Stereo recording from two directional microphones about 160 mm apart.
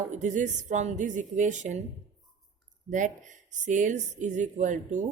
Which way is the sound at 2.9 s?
50° right (ahead or behind).